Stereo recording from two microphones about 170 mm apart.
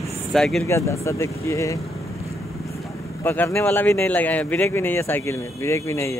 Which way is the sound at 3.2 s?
15° left (ahead or behind).